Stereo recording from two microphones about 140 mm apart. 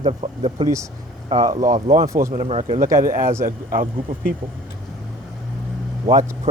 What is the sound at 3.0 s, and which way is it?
Speech, 80° right.